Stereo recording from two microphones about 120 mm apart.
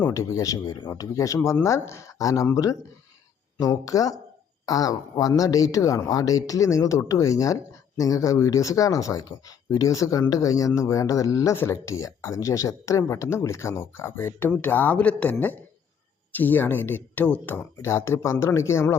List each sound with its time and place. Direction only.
0.1 s speech: 25° left (ahead or behind)